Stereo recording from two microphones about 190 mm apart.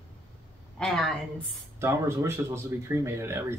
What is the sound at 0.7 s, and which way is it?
Speech, centre (ahead or behind).